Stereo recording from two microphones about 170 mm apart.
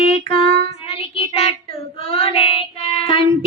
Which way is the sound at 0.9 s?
35° left (ahead or behind).